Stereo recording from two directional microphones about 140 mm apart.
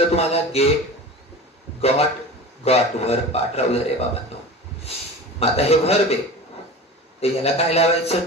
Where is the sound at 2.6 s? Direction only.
45° left (ahead or behind).